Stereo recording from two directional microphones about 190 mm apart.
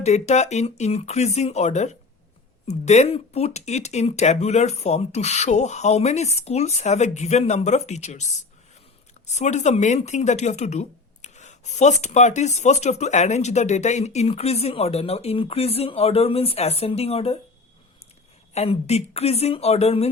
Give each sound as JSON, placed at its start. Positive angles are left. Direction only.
{"t": 0.0, "sound": "speech", "side_deg": 35}
{"t": 18.5, "sound": "speech", "side_deg": 35}